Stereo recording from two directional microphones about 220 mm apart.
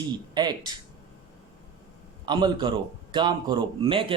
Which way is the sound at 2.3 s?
20° right (ahead or behind).